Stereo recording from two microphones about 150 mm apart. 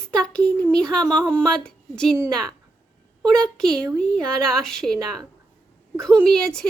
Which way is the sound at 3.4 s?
5° left (ahead or behind).